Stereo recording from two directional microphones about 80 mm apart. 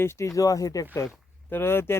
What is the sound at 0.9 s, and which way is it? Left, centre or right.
Speech, left.